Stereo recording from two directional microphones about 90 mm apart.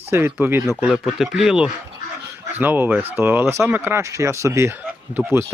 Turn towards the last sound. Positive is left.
turn(degrees=-25)  # may be behind; listen again after turning